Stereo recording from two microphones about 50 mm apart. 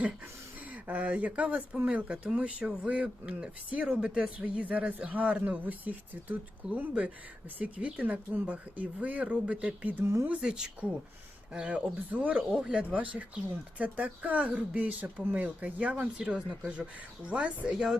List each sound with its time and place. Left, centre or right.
0.7 s speech: right
4.4 s speech: right
10.4 s speech: centre
11.5 s speech: right
17.7 s speech: centre